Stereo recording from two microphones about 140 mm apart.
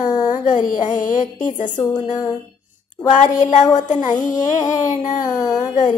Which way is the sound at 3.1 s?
60° left (ahead or behind).